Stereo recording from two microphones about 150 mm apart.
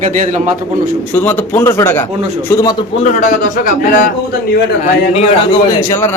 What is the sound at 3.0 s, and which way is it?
A man's voice, 55° left (ahead or behind).